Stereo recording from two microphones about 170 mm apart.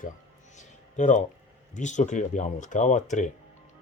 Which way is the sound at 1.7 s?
45° left (ahead or behind).